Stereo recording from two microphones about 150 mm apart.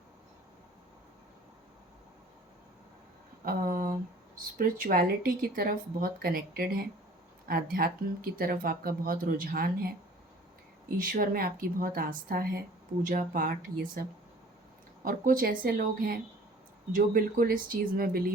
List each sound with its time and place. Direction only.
3.4 s a sound: 70° right (ahead or behind)
4.4 s speech: 70° right (ahead or behind)
10.9 s speech: 65° right (ahead or behind)
13.0 s speech: 65° right (ahead or behind)
15.0 s speech: 65° right (ahead or behind)